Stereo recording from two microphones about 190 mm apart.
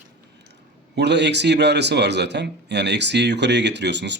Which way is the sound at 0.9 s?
65° right (ahead or behind).